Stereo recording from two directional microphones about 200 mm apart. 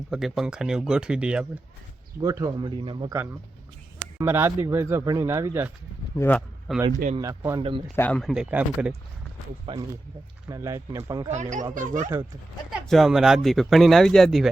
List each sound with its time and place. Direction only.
0.1 s speech: centre (ahead or behind)
2.2 s speech: 15° right (ahead or behind)
4.2 s speech: 10° right (ahead or behind)
6.1 s speech: 10° left (ahead or behind)
7.2 s speech: 15° right (ahead or behind)
7.9 s speech: 5° left (ahead or behind)
9.7 s speech: 25° right (ahead or behind)
10.5 s speech: 15° right (ahead or behind)
11.3 s speech: 35° right (ahead or behind)
12.9 s speech: centre (ahead or behind)